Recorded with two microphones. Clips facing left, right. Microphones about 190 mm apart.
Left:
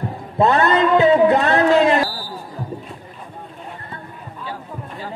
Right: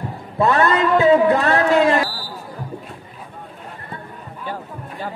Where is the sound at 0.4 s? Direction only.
20° left (ahead or behind).